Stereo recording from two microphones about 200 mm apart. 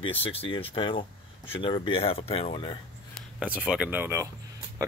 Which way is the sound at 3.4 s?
5° right (ahead or behind).